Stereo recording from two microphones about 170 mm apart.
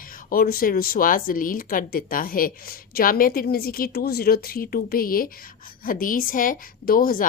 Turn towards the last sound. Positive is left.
turn(degrees=55)  # may be behind; listen again after turning